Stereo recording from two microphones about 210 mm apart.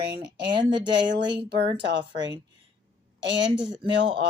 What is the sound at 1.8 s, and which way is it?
Speech, 55° right (ahead or behind).